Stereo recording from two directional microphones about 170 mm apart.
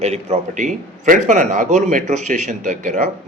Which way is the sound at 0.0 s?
40° right (ahead or behind).